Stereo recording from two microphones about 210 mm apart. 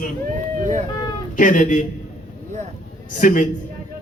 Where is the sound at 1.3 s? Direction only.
40° left (ahead or behind).